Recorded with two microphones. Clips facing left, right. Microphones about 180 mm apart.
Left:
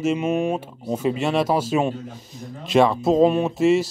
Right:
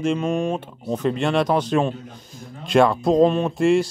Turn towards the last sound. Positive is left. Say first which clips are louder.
# even
turn(degrees=5)  # may be behind; listen again after turning